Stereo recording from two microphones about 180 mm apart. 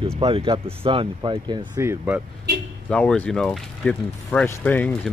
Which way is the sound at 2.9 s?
5° left (ahead or behind).